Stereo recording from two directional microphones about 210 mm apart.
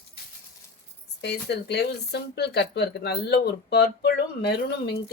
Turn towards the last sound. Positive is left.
turn(degrees=50)  # may be behind; listen again after turning